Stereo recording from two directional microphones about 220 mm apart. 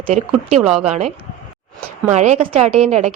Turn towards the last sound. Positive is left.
turn(degrees=-30)  # may be behind; listen again after turning